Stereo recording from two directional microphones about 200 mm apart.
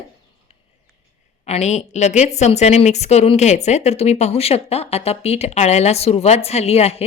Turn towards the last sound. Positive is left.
turn(degrees=30)  # may be behind; listen again after turning